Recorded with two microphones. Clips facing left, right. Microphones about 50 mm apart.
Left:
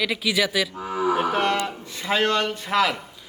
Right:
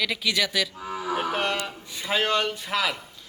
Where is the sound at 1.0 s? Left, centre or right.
Left.